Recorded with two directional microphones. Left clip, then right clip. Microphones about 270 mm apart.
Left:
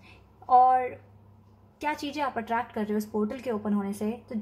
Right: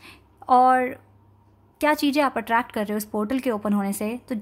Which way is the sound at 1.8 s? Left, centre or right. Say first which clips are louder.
Right 9 dB; right.